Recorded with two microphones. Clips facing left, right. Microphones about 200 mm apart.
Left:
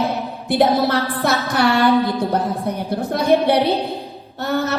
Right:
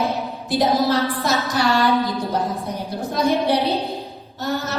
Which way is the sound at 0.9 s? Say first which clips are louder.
Left 1 dB; 60° left (ahead or behind).